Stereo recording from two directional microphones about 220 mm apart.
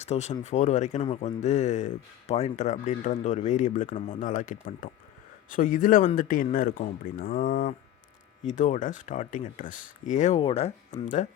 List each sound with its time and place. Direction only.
0.0 s speech: 30° left (ahead or behind)